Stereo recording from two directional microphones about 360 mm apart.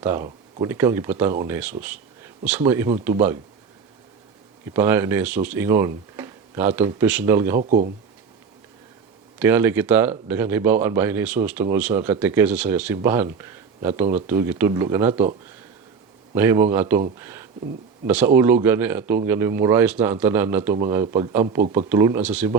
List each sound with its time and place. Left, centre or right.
0.0 s speech: centre
4.7 s speech: centre
7.6 s speech: centre
9.4 s speech: centre
16.3 s speech: centre